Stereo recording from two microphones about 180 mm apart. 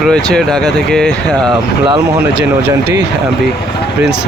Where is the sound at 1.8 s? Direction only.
25° right (ahead or behind).